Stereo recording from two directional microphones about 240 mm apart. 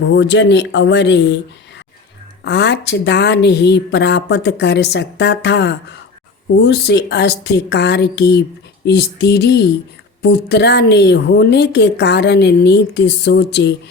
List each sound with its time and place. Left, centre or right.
0.0 s a woman's voice: left
2.4 s a woman's voice: left